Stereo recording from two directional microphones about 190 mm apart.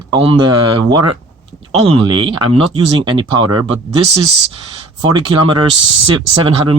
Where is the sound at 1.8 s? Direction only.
25° right (ahead or behind).